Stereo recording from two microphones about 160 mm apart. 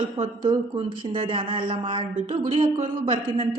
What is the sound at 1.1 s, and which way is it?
Speech, 35° right (ahead or behind).